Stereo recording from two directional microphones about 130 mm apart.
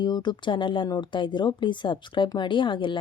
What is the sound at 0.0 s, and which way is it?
Speech, 35° left (ahead or behind).